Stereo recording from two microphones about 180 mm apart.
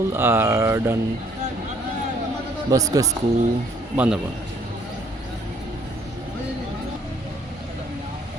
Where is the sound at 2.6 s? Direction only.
20° right (ahead or behind).